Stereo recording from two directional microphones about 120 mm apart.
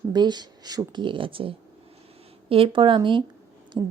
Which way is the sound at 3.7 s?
30° right (ahead or behind).